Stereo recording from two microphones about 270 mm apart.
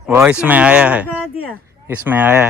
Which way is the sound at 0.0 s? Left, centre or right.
Centre.